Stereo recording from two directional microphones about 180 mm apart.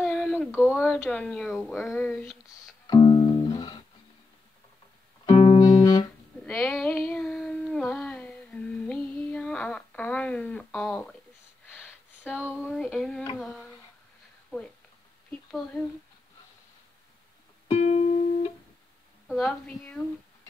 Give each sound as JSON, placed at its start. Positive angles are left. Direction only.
{"t": 0.0, "sound": "a sound", "side_deg": 5}
{"t": 0.7, "sound": "speech", "side_deg": 10}
{"t": 2.9, "sound": "music", "side_deg": 25}
{"t": 5.2, "sound": "music", "side_deg": 30}
{"t": 6.4, "sound": "child singing", "side_deg": 5}
{"t": 12.2, "sound": "a sound", "side_deg": -5}
{"t": 12.6, "sound": "child singing", "side_deg": 0}
{"t": 13.4, "sound": "a sound", "side_deg": 0}
{"t": 17.6, "sound": "music", "side_deg": 35}
{"t": 19.2, "sound": "a woman's voice", "side_deg": 0}